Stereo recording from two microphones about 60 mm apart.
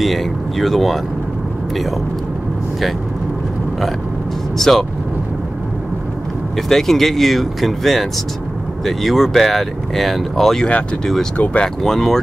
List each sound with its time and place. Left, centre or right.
0.0 s speech: centre
4.6 s speech: centre
6.7 s speech: centre
11.3 s speech: left
11.6 s speech: centre